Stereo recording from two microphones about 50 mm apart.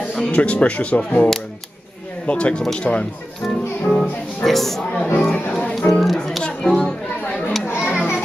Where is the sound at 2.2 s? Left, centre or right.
Left.